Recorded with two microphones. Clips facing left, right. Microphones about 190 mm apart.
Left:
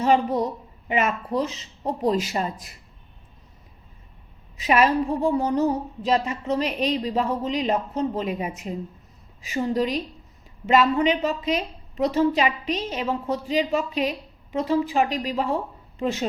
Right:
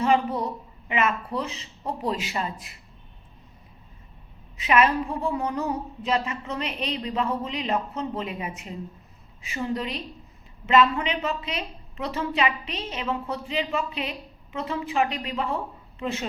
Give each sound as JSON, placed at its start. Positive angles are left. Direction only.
{"t": 0.0, "sound": "a woman's voice", "side_deg": 35}
{"t": 4.5, "sound": "a woman's voice", "side_deg": 40}